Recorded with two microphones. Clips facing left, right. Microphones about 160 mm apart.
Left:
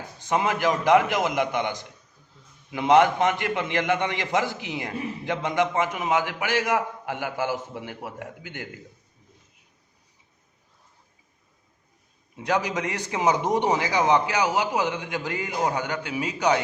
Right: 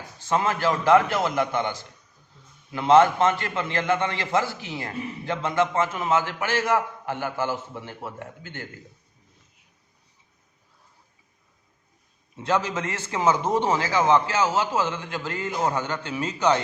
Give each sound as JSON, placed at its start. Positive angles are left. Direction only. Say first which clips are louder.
{"t": 0.2, "sound": "a man's voice", "louder": "even", "side_deg": 15}
{"t": 12.4, "sound": "a man's voice", "louder": "even", "side_deg": 15}